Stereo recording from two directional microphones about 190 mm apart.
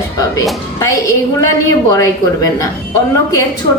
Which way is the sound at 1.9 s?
15° left (ahead or behind).